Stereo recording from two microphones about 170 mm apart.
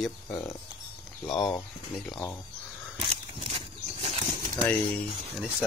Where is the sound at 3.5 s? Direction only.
30° right (ahead or behind).